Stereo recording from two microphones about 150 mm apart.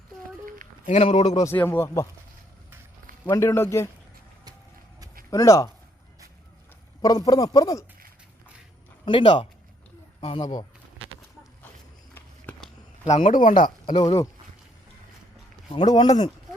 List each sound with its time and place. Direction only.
0.9 s speech: 50° left (ahead or behind)
1.5 s speech: 15° left (ahead or behind)
3.2 s speech: 15° left (ahead or behind)
5.3 s speech: 20° left (ahead or behind)
7.0 s speech: 25° left (ahead or behind)
9.0 s speech: 35° left (ahead or behind)
13.1 s speech: 50° left (ahead or behind)
15.7 s speech: 30° left (ahead or behind)